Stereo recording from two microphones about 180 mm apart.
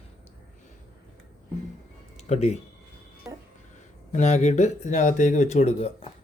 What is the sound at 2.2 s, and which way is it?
Speech, 35° left (ahead or behind).